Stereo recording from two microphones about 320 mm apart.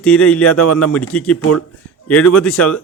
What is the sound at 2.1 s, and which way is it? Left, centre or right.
Speech, left.